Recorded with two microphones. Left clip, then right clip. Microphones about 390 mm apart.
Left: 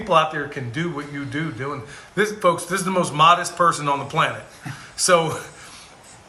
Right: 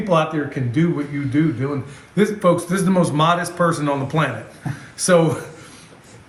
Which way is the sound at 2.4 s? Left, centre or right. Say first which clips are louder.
Right 2 dB; left.